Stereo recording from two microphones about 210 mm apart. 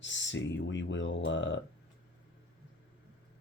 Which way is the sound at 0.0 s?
60° left (ahead or behind).